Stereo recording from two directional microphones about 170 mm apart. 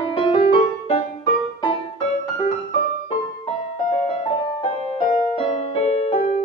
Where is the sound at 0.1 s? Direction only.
30° left (ahead or behind).